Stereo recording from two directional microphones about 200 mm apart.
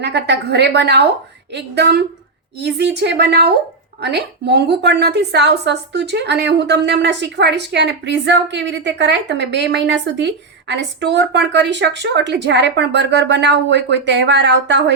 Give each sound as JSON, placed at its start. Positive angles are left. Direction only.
{"t": 0.0, "sound": "a woman's voice", "side_deg": -60}